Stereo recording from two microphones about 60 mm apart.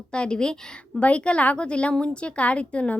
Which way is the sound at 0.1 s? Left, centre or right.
Centre.